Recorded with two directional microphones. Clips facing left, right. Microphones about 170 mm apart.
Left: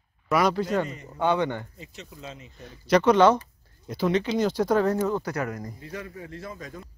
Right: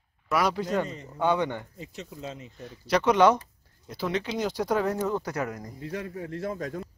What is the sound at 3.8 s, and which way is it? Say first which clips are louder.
Speech: left 5 dB; 5° right (ahead or behind).